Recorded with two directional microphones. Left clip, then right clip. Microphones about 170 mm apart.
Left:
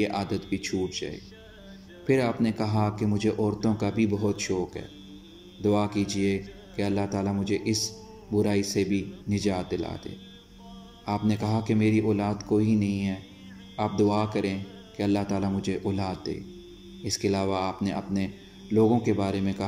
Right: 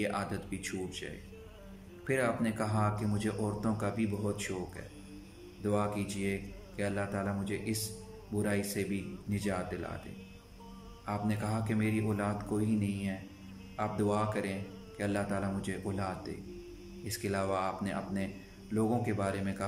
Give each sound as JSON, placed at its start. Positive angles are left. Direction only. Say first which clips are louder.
{"t": 0.0, "sound": "a man's voice", "louder": "left 7 dB", "side_deg": 15}
{"t": 11.1, "sound": "a man's voice", "louder": "left 7 dB", "side_deg": 20}